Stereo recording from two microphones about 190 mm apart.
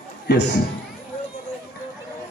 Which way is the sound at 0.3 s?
65° left (ahead or behind).